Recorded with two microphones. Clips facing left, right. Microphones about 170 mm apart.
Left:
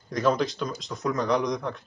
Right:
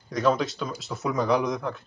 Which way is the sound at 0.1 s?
Centre (ahead or behind).